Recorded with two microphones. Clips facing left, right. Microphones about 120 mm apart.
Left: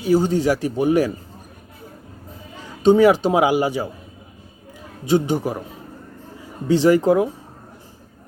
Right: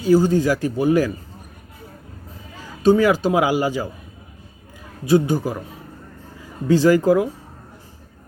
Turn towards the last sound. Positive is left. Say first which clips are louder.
# even
turn(degrees=25)  # may be behind; listen again after turning